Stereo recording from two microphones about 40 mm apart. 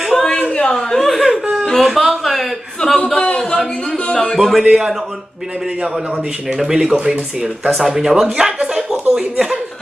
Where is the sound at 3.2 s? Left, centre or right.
Left.